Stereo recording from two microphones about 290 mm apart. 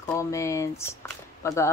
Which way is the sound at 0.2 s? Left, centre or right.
Centre.